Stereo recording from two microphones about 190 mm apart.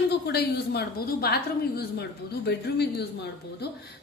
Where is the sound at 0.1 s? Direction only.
60° left (ahead or behind).